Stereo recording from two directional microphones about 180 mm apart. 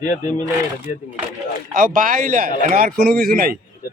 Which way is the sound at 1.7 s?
50° right (ahead or behind).